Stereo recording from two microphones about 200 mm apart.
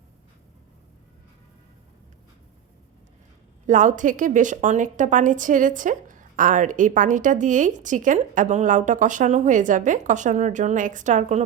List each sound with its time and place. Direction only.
3.7 s a woman's voice: 40° right (ahead or behind)